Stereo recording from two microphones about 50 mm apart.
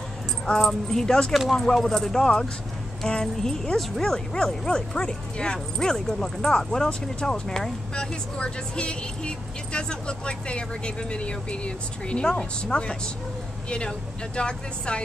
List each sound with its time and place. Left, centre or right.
0.5 s speech: centre
1.3 s speech: centre